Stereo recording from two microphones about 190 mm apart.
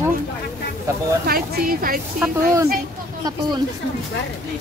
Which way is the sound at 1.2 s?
50° right (ahead or behind).